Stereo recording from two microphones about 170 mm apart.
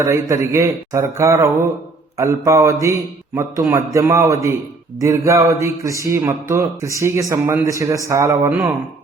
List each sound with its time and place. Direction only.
0.0 s speech: 15° right (ahead or behind)
8.4 s speech: 5° right (ahead or behind)